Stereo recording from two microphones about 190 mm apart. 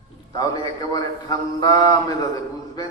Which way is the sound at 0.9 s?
20° left (ahead or behind).